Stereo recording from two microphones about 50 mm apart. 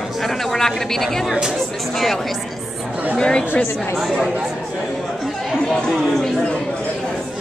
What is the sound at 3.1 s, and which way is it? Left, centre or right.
Speech, centre.